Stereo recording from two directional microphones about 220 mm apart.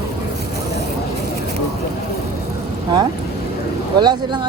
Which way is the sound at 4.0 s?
20° right (ahead or behind).